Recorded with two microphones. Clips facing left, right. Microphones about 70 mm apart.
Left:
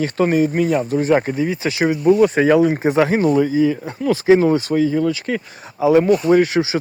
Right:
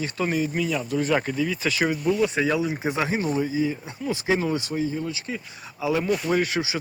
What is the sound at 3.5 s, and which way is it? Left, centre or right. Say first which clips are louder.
Speech: left 8 dB; left.